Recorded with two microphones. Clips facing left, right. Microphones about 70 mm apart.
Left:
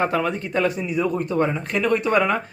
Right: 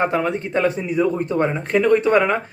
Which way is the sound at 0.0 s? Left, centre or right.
Right.